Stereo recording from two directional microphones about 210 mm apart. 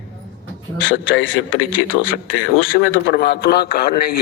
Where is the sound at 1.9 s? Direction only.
45° left (ahead or behind).